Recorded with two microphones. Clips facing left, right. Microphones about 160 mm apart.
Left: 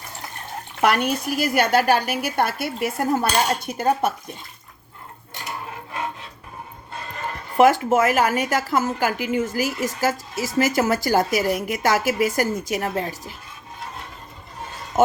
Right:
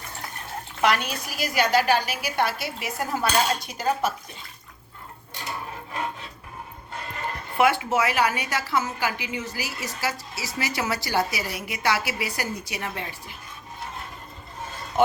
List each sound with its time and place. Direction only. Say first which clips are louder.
0.8 s a woman's voice: left 4 dB; 50° left (ahead or behind)
7.5 s a woman's voice: left 6 dB; 40° left (ahead or behind)
14.9 s speech: left 3 dB; 45° left (ahead or behind)